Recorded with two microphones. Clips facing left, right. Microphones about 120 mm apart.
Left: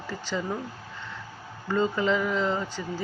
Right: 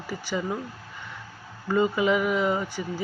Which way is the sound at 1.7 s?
15° right (ahead or behind).